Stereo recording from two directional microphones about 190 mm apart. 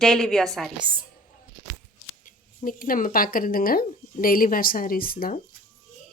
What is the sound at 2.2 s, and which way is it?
Speech, 45° left (ahead or behind).